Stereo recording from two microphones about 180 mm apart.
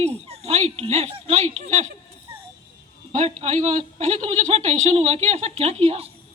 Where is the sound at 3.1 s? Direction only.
40° right (ahead or behind).